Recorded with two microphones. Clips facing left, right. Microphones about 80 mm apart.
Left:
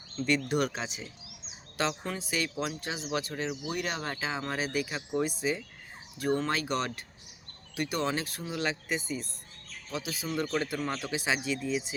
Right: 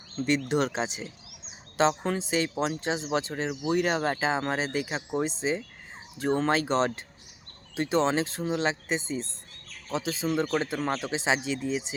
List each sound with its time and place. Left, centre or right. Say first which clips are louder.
0.3 s speech: right 2 dB; right